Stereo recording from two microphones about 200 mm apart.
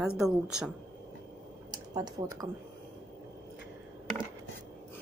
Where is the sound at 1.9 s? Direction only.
20° right (ahead or behind).